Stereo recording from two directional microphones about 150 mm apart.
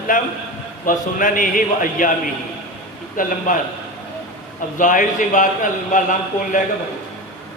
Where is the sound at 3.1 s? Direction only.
65° left (ahead or behind).